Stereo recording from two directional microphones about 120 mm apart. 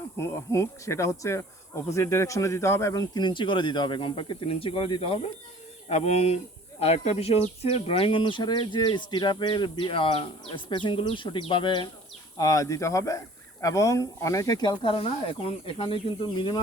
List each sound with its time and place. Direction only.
0.2 s speech: 25° left (ahead or behind); by 5.3 s 50° left (ahead or behind)
5.9 s speech: 65° left (ahead or behind); by 11.9 s 40° left (ahead or behind)
12.4 s speech: 30° left (ahead or behind)